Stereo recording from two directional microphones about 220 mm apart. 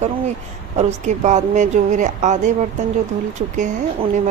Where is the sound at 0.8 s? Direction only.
30° right (ahead or behind).